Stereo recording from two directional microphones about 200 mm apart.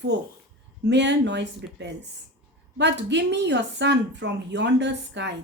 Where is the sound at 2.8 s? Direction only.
60° right (ahead or behind).